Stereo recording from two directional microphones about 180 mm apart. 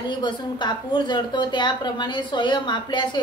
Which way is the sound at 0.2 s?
25° left (ahead or behind).